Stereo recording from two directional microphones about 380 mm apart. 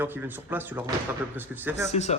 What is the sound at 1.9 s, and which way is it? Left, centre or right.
Speech, centre.